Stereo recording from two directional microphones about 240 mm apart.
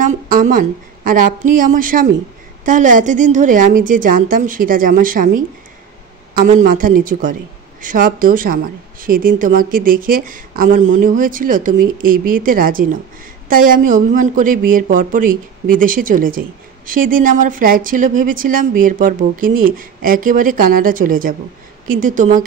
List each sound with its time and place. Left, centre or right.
0.0 s a woman's voice: right